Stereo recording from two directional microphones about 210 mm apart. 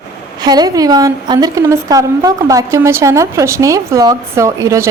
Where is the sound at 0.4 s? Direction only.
20° right (ahead or behind).